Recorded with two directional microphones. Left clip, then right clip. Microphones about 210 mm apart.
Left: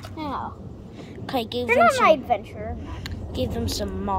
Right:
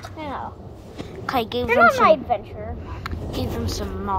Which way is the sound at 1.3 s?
5° left (ahead or behind).